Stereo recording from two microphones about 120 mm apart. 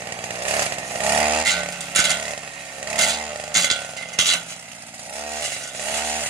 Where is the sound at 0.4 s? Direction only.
20° right (ahead or behind).